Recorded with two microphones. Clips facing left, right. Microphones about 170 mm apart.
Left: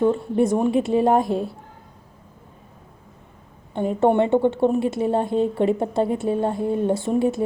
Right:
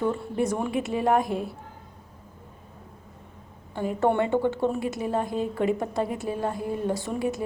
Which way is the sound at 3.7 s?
25° left (ahead or behind).